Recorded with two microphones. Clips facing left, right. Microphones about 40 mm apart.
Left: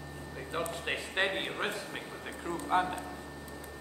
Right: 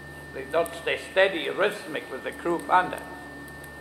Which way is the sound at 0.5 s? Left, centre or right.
Right.